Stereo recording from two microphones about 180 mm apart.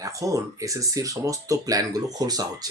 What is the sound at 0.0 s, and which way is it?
Speech, 20° right (ahead or behind).